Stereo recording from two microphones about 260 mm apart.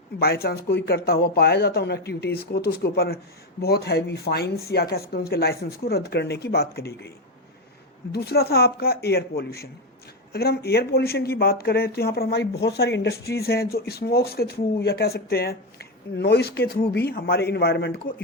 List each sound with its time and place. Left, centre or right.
0.2 s speech: left
8.1 s speech: left